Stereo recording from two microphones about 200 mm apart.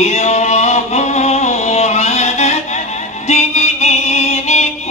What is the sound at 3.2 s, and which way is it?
Music, 35° left (ahead or behind).